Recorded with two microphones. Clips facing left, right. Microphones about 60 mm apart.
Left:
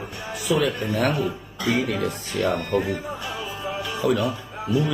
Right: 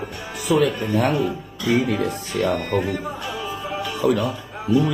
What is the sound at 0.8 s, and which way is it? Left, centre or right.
Speech, right.